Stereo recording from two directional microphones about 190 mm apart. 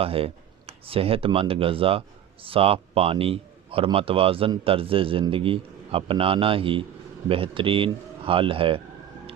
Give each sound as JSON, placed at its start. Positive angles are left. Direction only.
{"t": 0.0, "sound": "a man's voice", "side_deg": -30}